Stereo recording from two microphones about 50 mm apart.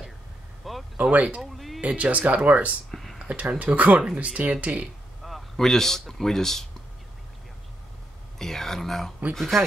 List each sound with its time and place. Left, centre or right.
0.7 s a sound: centre
1.1 s speech: right
1.4 s music: centre
1.8 s speech: right
2.9 s a sound: centre
3.3 s speech: right
5.2 s speech: centre
8.4 s a sound: centre
9.3 s speech: centre